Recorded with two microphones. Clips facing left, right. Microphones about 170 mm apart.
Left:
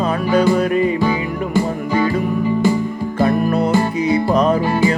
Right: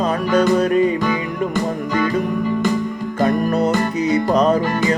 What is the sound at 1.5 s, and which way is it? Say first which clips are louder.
Music: left 2 dB; 15° left (ahead or behind).